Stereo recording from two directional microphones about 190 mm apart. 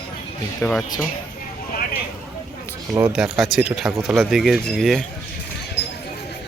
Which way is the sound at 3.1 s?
5° right (ahead or behind).